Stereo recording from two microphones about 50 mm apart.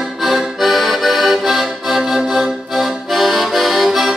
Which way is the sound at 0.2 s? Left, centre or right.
Centre.